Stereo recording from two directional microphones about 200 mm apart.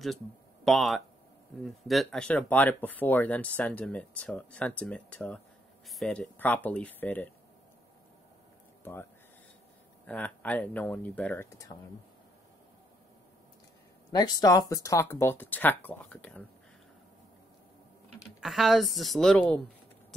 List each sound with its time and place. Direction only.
0.7 s a woman's voice: centre (ahead or behind)
10.0 s speech: 5° left (ahead or behind)
14.1 s speech: 20° left (ahead or behind)
18.4 s a woman's voice: centre (ahead or behind)